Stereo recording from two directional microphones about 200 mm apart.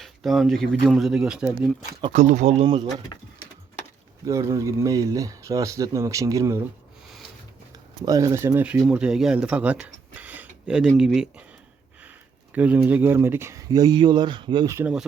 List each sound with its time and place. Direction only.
0.0 s speech: centre (ahead or behind)
2.1 s speech: 35° right (ahead or behind)
2.6 s speech: 20° right (ahead or behind)
4.3 s speech: 15° right (ahead or behind)
8.0 s speech: 15° right (ahead or behind)
12.5 s speech: 10° right (ahead or behind)